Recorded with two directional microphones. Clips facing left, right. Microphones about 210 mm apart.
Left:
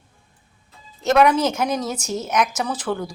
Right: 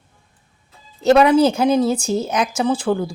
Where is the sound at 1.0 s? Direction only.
30° right (ahead or behind).